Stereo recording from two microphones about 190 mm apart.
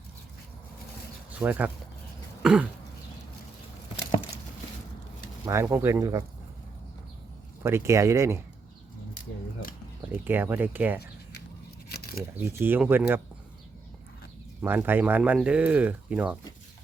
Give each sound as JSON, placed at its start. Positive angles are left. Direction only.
{"t": 1.4, "sound": "speech", "side_deg": -10}
{"t": 2.4, "sound": "cough", "side_deg": -5}
{"t": 5.5, "sound": "speech", "side_deg": -15}
{"t": 7.6, "sound": "speech", "side_deg": -15}
{"t": 9.6, "sound": "speech", "side_deg": 50}
{"t": 10.2, "sound": "speech", "side_deg": -10}
{"t": 12.4, "sound": "speech", "side_deg": -10}
{"t": 14.6, "sound": "speech", "side_deg": -10}